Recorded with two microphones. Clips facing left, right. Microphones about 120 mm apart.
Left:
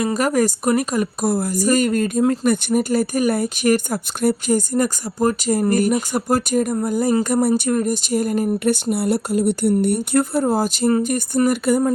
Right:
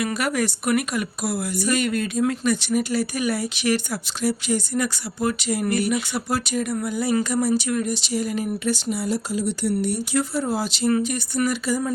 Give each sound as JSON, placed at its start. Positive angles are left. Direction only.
{"t": 0.0, "sound": "speech", "side_deg": 40}
{"t": 7.4, "sound": "speech", "side_deg": 50}